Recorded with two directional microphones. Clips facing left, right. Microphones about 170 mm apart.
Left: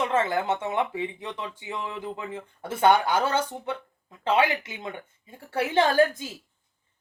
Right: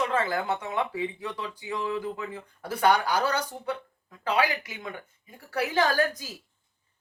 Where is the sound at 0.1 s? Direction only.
25° left (ahead or behind).